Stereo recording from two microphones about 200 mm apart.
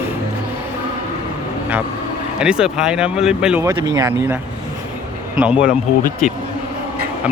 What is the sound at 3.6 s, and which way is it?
Speech, 20° right (ahead or behind).